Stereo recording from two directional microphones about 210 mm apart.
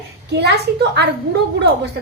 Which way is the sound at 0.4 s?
50° right (ahead or behind).